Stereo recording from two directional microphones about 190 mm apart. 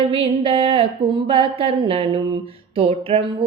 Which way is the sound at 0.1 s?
30° right (ahead or behind).